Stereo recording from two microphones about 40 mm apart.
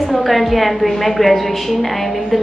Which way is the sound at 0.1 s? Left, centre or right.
Centre.